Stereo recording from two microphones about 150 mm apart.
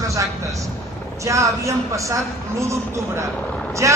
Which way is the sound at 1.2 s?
20° right (ahead or behind).